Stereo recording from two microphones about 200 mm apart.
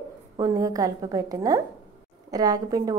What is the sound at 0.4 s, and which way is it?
A woman's voice, 15° right (ahead or behind).